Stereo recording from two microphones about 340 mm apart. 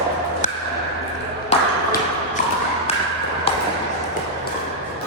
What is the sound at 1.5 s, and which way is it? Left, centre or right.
Ping, centre.